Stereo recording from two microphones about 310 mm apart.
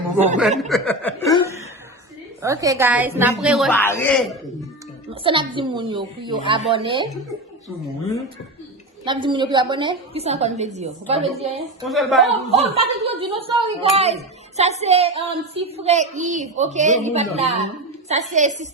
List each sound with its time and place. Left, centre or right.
0.7 s chuckle: centre
2.4 s a woman's voice: centre
5.2 s a woman's voice: centre
9.0 s a woman's voice: centre
11.9 s a man's voice: centre
12.4 s a woman's voice: centre